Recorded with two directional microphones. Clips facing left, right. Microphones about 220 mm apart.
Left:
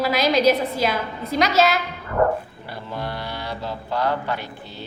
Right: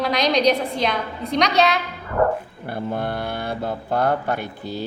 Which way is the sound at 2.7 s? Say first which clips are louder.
Right 5 dB; 55° right (ahead or behind).